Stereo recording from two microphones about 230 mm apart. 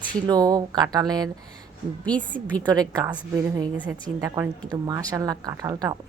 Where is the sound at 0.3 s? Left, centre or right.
Centre.